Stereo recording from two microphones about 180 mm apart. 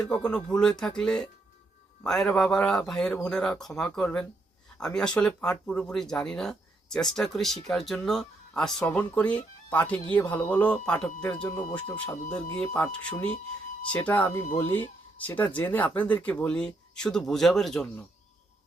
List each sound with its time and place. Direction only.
0.0 s speech: 5° left (ahead or behind)